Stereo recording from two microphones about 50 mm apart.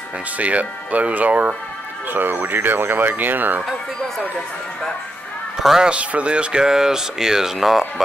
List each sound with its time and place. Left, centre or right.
0.4 s speech: right
2.1 s speech: right
5.6 s speech: centre
5.9 s speech: right; by 7.8 s centre